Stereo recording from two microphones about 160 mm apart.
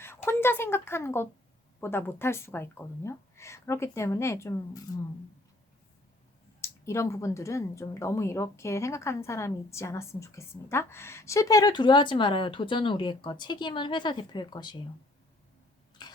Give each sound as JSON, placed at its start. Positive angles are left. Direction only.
{"t": 0.0, "sound": "a woman's voice", "side_deg": 15}
{"t": 6.6, "sound": "a woman's voice", "side_deg": 15}
{"t": 16.0, "sound": "a sound", "side_deg": 25}